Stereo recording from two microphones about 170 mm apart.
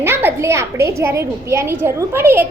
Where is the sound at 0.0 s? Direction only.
15° right (ahead or behind).